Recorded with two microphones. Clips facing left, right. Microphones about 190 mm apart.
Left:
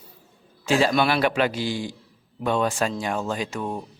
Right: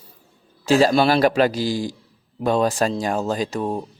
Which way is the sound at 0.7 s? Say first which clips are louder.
Right 5 dB; 40° right (ahead or behind).